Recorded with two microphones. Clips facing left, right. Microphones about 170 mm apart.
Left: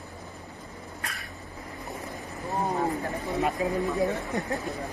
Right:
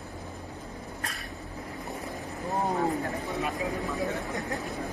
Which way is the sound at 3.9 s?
20° left (ahead or behind).